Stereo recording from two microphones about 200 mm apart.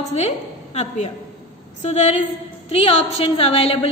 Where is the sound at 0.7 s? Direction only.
35° left (ahead or behind).